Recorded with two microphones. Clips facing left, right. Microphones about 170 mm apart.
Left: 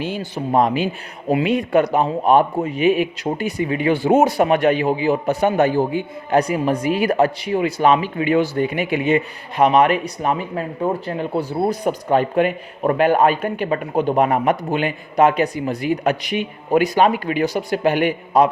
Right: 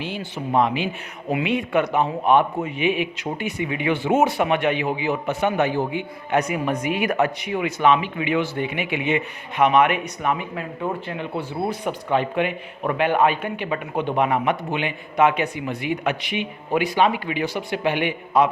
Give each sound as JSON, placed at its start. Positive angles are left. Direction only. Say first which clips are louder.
{"t": 0.0, "sound": "a man's voice", "louder": "left 4 dB", "side_deg": 40}